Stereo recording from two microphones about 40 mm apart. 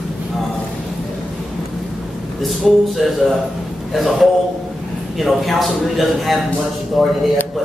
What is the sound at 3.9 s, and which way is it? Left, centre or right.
Speech, centre.